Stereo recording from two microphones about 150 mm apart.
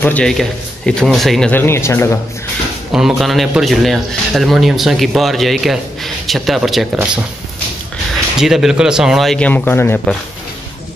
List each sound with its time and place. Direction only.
0.0 s a man's voice: 10° left (ahead or behind)
1.5 s speech: 15° left (ahead or behind)
2.9 s a man's voice: 5° right (ahead or behind)
8.4 s a man's voice: 5° right (ahead or behind); by 10.0 s 15° left (ahead or behind)